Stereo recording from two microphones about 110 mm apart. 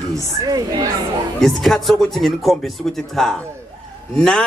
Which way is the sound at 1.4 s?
Centre (ahead or behind).